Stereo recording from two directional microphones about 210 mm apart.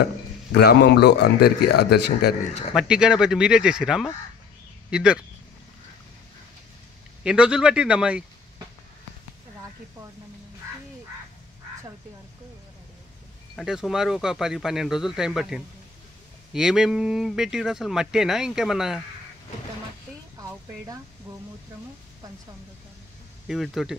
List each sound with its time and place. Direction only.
0.5 s a man's voice: 55° left (ahead or behind)
2.4 s speech: 30° left (ahead or behind)
2.7 s speech: 5° right (ahead or behind)
7.2 s speech: 5° right (ahead or behind)
13.6 s speech: centre (ahead or behind)
20.3 s a sound: 15° right (ahead or behind)
23.4 s speech: centre (ahead or behind)